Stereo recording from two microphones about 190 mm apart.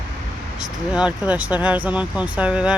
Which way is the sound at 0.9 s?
5° right (ahead or behind).